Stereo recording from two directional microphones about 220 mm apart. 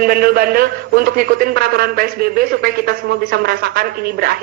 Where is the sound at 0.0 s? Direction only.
40° right (ahead or behind).